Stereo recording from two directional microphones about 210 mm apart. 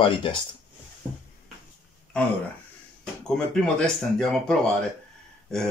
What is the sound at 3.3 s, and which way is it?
Speech, 5° left (ahead or behind).